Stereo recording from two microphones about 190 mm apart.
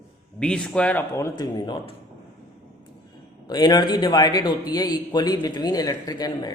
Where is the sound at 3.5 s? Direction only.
20° left (ahead or behind).